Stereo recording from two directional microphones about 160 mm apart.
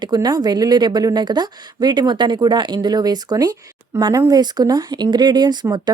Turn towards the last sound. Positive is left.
turn(degrees=-25)  # may be behind; listen again after turning